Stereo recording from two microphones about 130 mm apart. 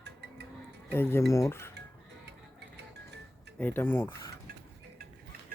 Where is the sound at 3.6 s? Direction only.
15° left (ahead or behind).